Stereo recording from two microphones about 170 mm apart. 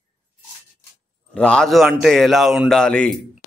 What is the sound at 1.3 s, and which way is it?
Speech, 5° left (ahead or behind).